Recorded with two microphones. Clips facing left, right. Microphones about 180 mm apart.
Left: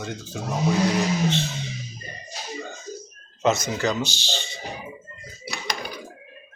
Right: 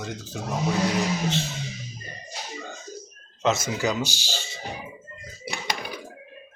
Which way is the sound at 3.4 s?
5° right (ahead or behind).